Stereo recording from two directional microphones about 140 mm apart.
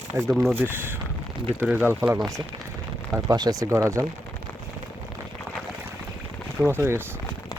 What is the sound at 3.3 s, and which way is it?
Speech, 25° right (ahead or behind).